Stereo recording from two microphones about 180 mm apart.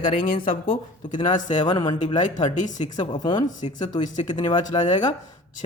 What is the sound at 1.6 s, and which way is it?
Speech, 25° left (ahead or behind).